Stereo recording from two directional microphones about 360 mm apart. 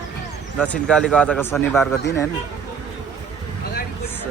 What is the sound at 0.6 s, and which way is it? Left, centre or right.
Speech, centre.